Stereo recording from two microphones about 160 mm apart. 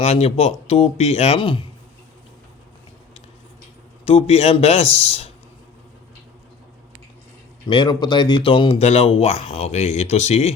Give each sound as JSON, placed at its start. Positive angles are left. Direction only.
{"t": 0.0, "sound": "speech", "side_deg": 40}
{"t": 4.0, "sound": "speech", "side_deg": 40}
{"t": 7.7, "sound": "speech", "side_deg": 30}